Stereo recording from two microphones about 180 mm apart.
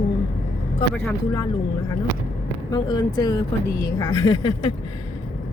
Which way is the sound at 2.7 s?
20° left (ahead or behind).